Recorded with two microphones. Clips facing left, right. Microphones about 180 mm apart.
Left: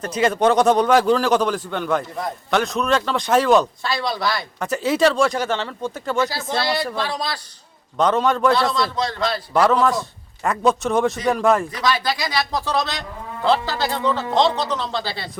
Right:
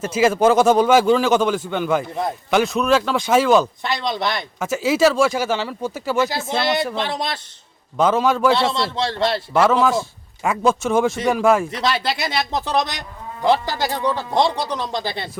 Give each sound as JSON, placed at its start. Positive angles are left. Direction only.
{"t": 0.0, "sound": "a man's voice", "side_deg": -5}
{"t": 3.8, "sound": "a man's voice", "side_deg": -20}
{"t": 4.6, "sound": "a man's voice", "side_deg": -5}
{"t": 6.6, "sound": "a man's voice", "side_deg": -20}
{"t": 7.9, "sound": "a man's voice", "side_deg": -5}
{"t": 8.7, "sound": "a man's voice", "side_deg": -30}
{"t": 9.5, "sound": "a man's voice", "side_deg": 0}
{"t": 11.7, "sound": "speech", "side_deg": -25}